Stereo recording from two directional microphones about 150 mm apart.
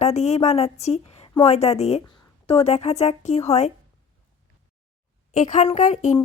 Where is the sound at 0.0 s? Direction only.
45° left (ahead or behind).